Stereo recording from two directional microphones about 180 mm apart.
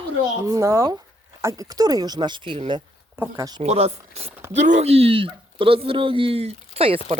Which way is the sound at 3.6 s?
35° right (ahead or behind).